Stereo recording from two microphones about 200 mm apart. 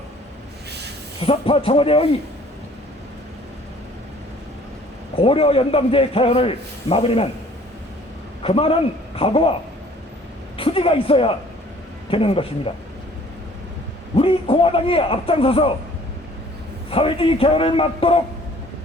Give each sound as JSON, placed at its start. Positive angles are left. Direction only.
{"t": 1.2, "sound": "a man's voice", "side_deg": 30}
{"t": 5.1, "sound": "a man's voice", "side_deg": 30}
{"t": 8.4, "sound": "a man's voice", "side_deg": 30}
{"t": 10.6, "sound": "a man's voice", "side_deg": 25}
{"t": 14.2, "sound": "a man's voice", "side_deg": 25}
{"t": 16.9, "sound": "a man's voice", "side_deg": 25}